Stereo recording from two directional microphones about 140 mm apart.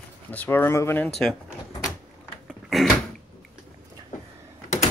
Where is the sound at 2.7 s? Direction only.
Centre (ahead or behind).